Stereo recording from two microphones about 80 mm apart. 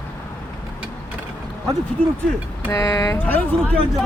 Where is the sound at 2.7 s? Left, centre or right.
Left.